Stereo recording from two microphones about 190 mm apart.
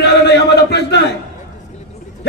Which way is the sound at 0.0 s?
60° left (ahead or behind).